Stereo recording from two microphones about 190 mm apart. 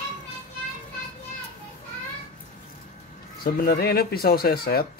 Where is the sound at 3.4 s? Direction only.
50° left (ahead or behind).